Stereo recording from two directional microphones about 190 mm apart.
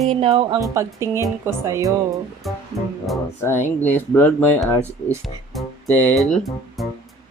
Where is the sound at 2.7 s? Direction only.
15° right (ahead or behind).